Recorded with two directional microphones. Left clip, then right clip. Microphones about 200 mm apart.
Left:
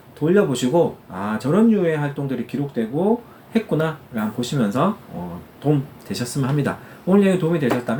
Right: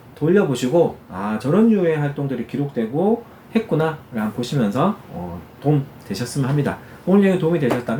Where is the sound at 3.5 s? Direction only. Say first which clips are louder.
Right 1 dB; 15° left (ahead or behind).